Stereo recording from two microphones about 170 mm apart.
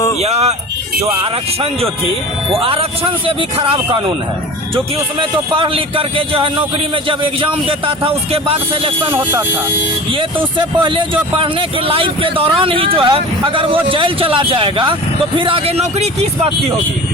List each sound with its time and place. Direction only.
0.2 s speech: 40° right (ahead or behind)
2.5 s speech: 35° right (ahead or behind)
5.5 s speech: 30° right (ahead or behind)